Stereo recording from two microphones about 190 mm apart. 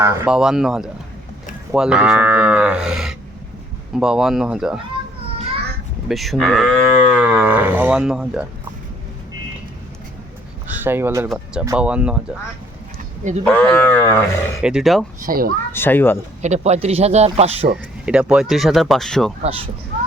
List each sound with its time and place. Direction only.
0.0 s cattle: 15° right (ahead or behind)
6.1 s cattle: centre (ahead or behind)
10.7 s speech: 10° right (ahead or behind)
11.6 s cattle: 10° right (ahead or behind)
13.4 s speech: 10° left (ahead or behind)
14.6 s cattle: 5° right (ahead or behind)
15.2 s speech: 50° right (ahead or behind)
15.7 s speech: 10° left (ahead or behind)
16.4 s speech: 35° right (ahead or behind)
18.0 s cattle: 5° right (ahead or behind)
19.4 s speech: 30° right (ahead or behind)